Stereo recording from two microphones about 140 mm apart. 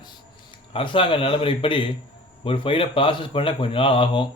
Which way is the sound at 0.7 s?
40° left (ahead or behind).